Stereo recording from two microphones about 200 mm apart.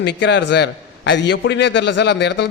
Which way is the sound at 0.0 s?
60° left (ahead or behind).